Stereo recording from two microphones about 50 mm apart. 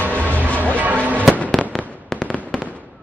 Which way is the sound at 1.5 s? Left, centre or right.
Centre.